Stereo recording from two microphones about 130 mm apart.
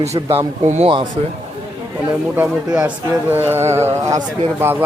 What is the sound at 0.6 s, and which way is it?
Speech, 60° right (ahead or behind).